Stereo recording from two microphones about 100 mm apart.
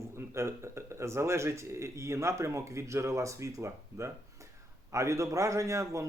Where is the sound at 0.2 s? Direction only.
30° right (ahead or behind).